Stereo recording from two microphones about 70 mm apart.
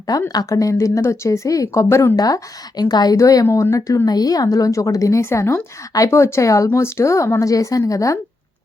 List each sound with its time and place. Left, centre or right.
0.3 s speech: left
2.1 s a woman's voice: left
3.5 s speech: left